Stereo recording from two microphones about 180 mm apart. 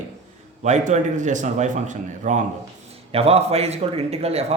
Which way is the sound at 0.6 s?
40° right (ahead or behind).